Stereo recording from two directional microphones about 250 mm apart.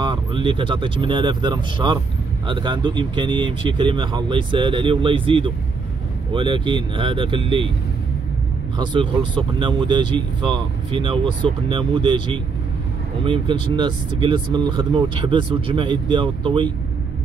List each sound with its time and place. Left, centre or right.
0.0 s speech: centre
8.7 s speech: centre